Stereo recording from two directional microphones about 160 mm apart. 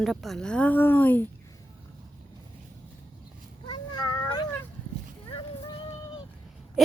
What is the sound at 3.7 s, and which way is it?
Cat, 25° left (ahead or behind).